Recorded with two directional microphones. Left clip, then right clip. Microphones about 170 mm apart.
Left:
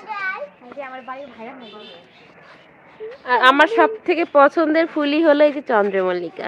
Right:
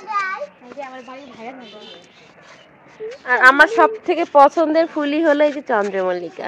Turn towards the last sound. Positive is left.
turn(degrees=15)  # may be behind; listen again after turning